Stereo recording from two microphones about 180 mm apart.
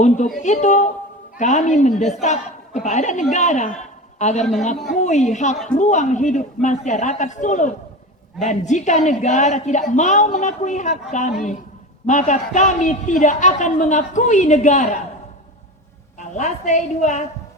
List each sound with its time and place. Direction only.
0.3 s a woman's voice: 40° left (ahead or behind)
16.1 s a woman's voice: 40° left (ahead or behind)